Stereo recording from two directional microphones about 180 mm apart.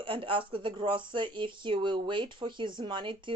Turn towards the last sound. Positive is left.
turn(degrees=-25)  # may be behind; listen again after turning